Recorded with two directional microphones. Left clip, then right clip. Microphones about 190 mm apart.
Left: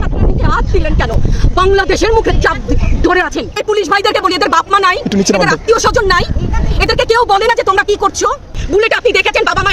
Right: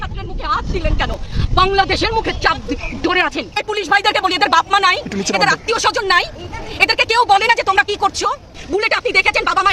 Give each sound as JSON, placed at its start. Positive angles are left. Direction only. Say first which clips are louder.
{"t": 0.4, "sound": "speech", "louder": "left 3 dB", "side_deg": 5}
{"t": 5.0, "sound": "speech", "louder": "left 8 dB", "side_deg": 35}
{"t": 5.3, "sound": "speech", "louder": "left 4 dB", "side_deg": 5}